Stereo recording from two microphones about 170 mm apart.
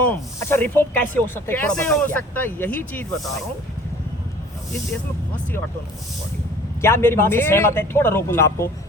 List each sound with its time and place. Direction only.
0.0 s speech: 10° left (ahead or behind)
6.8 s speech: 15° left (ahead or behind)